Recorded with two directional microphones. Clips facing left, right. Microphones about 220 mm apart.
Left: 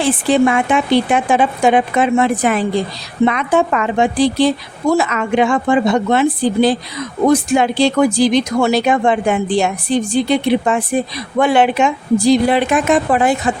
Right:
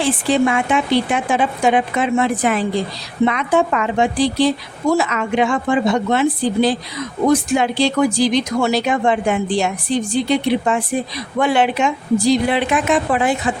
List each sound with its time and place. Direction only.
0.0 s a woman's voice: 55° left (ahead or behind)